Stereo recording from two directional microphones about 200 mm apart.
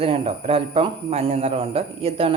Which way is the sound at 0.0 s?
25° right (ahead or behind).